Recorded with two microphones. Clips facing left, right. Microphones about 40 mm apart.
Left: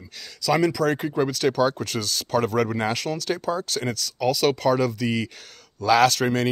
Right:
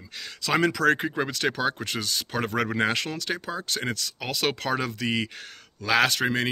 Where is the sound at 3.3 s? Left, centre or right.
Centre.